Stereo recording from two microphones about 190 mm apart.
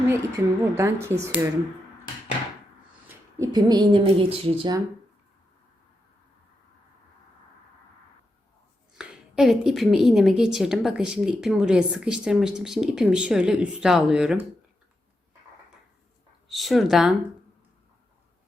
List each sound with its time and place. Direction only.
0.1 s speech: 15° right (ahead or behind)
3.1 s speech: 15° right (ahead or behind)
9.0 s a woman's voice: 5° right (ahead or behind)
16.5 s a woman's voice: centre (ahead or behind)